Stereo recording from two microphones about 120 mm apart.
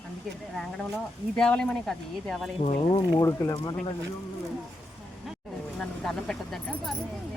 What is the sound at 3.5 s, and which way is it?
Speech, 40° left (ahead or behind).